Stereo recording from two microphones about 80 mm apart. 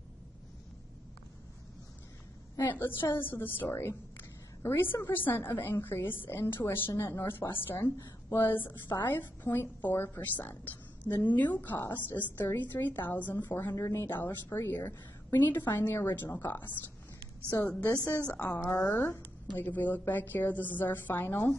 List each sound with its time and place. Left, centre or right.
2.6 s a woman's voice: left